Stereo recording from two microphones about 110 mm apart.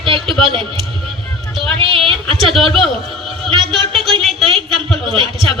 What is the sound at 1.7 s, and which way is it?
Speech, 55° right (ahead or behind).